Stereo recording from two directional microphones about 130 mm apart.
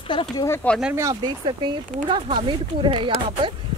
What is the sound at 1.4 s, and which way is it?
Speech, 40° right (ahead or behind).